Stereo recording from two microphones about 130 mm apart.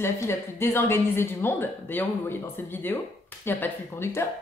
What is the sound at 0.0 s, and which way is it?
A woman's voice, 20° left (ahead or behind).